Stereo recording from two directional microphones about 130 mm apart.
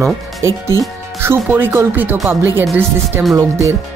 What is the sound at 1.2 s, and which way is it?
Speech, 15° right (ahead or behind).